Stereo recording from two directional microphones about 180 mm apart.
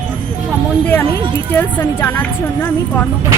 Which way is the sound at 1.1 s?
25° right (ahead or behind).